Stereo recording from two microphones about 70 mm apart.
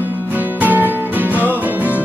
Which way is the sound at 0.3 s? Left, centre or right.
Right.